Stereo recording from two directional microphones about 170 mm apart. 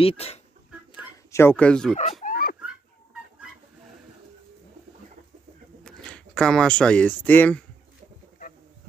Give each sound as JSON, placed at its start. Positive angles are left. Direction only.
{"t": 0.0, "sound": "speech", "side_deg": 35}
{"t": 1.3, "sound": "speech", "side_deg": 15}
{"t": 2.2, "sound": "a sound", "side_deg": 60}
{"t": 5.9, "sound": "speech", "side_deg": 5}